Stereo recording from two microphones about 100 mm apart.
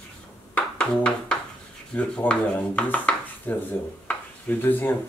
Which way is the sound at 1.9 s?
10° left (ahead or behind).